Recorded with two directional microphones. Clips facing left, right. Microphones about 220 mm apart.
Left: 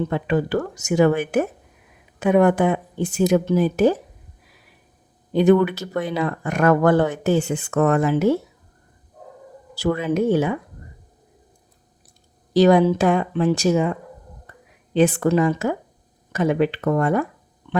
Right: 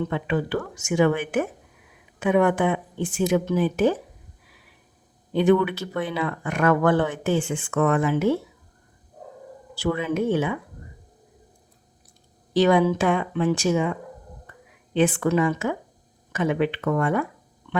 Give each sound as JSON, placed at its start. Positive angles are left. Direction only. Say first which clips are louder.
{"t": 0.0, "sound": "speech", "louder": "left 4 dB", "side_deg": 40}
{"t": 5.3, "sound": "speech", "louder": "left 3 dB", "side_deg": 40}
{"t": 9.7, "sound": "speech", "louder": "left 3 dB", "side_deg": 40}
{"t": 12.5, "sound": "speech", "louder": "left 4 dB", "side_deg": 40}
{"t": 14.5, "sound": "whispering", "louder": "left 1 dB", "side_deg": 40}
{"t": 14.9, "sound": "speech", "louder": "left 3 dB", "side_deg": 40}